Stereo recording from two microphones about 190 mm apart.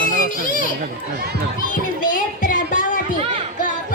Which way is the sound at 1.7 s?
45° left (ahead or behind).